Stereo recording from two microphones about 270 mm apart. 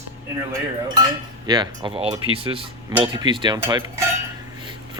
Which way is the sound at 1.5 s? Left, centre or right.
Centre.